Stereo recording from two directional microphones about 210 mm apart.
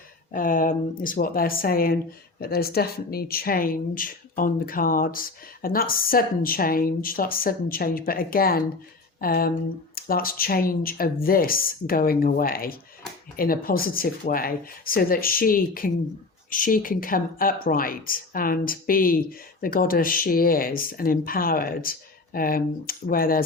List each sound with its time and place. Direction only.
0.3 s speech: 40° left (ahead or behind)